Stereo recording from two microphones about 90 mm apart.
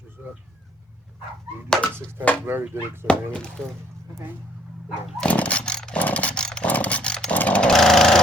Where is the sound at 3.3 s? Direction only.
10° left (ahead or behind).